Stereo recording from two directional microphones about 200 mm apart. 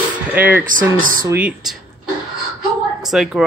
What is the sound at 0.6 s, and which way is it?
Speech, 40° right (ahead or behind).